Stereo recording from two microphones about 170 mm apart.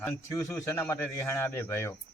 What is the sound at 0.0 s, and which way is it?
A man's voice, 15° left (ahead or behind).